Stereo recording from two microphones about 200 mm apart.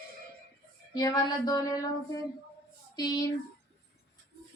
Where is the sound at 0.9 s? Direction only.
20° left (ahead or behind).